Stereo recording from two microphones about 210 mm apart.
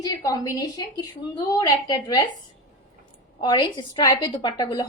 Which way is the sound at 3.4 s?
20° left (ahead or behind).